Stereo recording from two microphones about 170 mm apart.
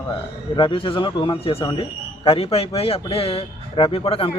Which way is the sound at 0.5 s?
30° left (ahead or behind).